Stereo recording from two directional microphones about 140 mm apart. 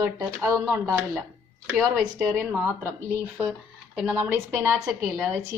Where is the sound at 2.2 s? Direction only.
10° right (ahead or behind).